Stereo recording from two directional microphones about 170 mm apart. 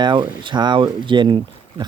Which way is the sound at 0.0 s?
25° right (ahead or behind).